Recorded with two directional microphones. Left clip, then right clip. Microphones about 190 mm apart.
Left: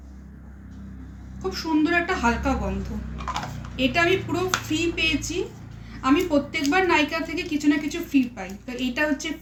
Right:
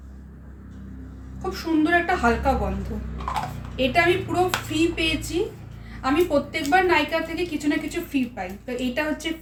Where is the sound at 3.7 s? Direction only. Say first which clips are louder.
Right 1 dB; 15° right (ahead or behind).